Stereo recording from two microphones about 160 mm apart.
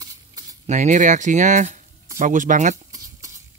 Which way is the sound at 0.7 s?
50° right (ahead or behind).